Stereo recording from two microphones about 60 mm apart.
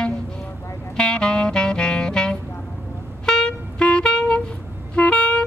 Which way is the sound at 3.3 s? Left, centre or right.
Centre.